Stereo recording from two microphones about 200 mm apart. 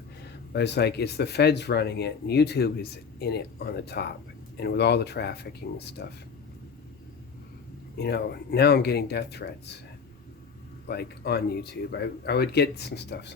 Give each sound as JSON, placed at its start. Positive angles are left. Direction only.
{"t": 0.5, "sound": "speech", "side_deg": 55}
{"t": 7.9, "sound": "speech", "side_deg": 55}
{"t": 10.8, "sound": "speech", "side_deg": 55}